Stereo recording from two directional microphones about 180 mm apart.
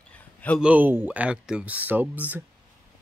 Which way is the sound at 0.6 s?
10° right (ahead or behind).